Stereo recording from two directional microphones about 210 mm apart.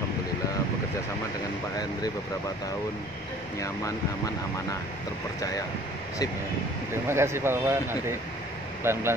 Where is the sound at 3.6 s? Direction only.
15° left (ahead or behind).